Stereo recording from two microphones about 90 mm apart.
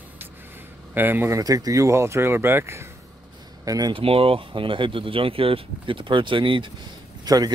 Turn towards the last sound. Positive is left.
turn(degrees=-45)  # may be behind; listen again after turning